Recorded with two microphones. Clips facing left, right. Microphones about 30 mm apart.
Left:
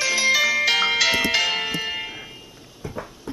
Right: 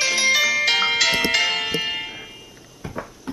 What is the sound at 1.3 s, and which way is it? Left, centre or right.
Bell, centre.